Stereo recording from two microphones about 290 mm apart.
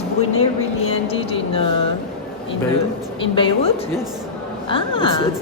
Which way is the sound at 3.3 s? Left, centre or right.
Centre.